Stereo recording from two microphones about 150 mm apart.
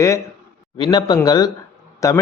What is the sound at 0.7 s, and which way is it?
A man's voice, 30° left (ahead or behind).